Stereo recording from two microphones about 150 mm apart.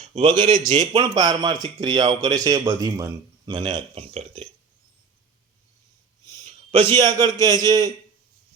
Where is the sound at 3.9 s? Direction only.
45° right (ahead or behind).